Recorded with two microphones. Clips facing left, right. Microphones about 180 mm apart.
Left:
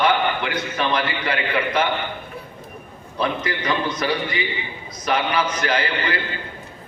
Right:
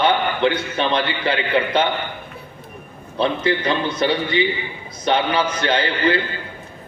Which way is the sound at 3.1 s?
30° right (ahead or behind).